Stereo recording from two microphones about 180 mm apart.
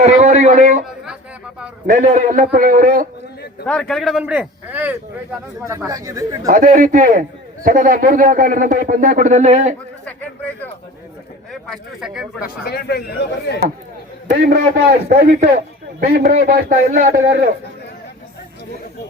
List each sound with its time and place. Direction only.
0.0 s a sound: 40° right (ahead or behind)
1.9 s a man's voice: 45° right (ahead or behind)
3.7 s speech: centre (ahead or behind); by 6.5 s 20° right (ahead or behind)
6.5 s a man's voice: 50° right (ahead or behind)
10.1 s speech: 10° left (ahead or behind)
11.7 s speech: 5° right (ahead or behind)
12.4 s speech: 60° left (ahead or behind)
15.2 s a man's voice: 45° right (ahead or behind)